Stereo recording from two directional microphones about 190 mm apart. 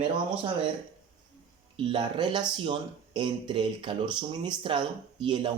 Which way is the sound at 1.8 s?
25° right (ahead or behind).